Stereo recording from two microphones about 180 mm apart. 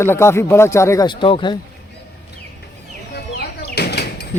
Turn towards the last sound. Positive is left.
turn(degrees=65)  # may be behind; listen again after turning